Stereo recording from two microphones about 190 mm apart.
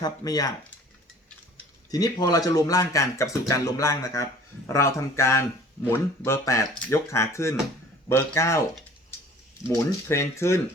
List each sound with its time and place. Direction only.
0.0 s speech: 20° left (ahead or behind)
1.9 s a man's voice: 20° left (ahead or behind)
9.6 s a man's voice: 15° left (ahead or behind)